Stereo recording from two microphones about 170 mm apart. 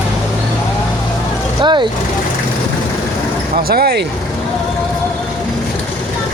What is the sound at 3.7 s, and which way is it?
Speech, 65° right (ahead or behind).